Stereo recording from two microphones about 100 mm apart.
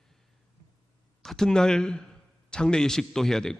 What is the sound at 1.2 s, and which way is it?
Speech, 5° left (ahead or behind).